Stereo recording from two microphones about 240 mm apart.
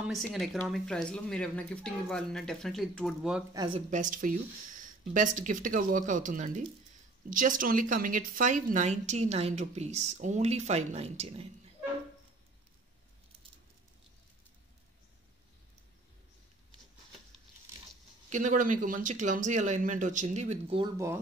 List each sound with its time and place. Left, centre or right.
0.0 s speech: centre
3.5 s a woman's voice: right
3.9 s a woman's voice: right
18.3 s speech: right
20.8 s speech: centre